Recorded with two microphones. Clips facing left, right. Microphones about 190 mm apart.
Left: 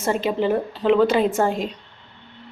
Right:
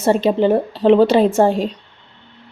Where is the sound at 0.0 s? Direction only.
35° right (ahead or behind).